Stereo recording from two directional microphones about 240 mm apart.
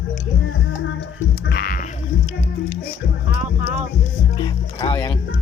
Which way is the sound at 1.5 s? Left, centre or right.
Left.